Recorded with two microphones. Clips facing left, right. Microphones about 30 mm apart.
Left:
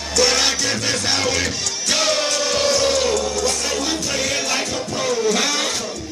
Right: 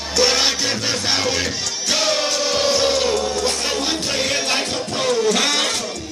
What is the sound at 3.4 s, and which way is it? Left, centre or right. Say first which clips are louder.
Music: even; right.